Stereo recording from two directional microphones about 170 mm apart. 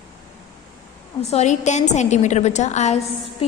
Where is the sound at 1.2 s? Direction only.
40° left (ahead or behind).